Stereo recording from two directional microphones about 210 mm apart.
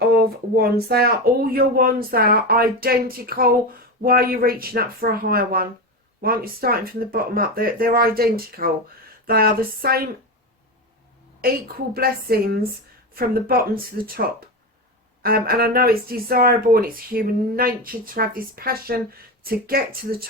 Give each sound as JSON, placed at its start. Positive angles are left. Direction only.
{"t": 0.0, "sound": "speech", "side_deg": -45}
{"t": 11.4, "sound": "speech", "side_deg": -45}